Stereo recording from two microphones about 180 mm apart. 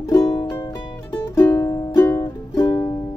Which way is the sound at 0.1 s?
20° left (ahead or behind).